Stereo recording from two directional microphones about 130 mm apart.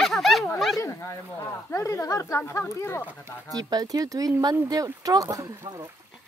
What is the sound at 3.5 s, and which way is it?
Speech, 30° right (ahead or behind).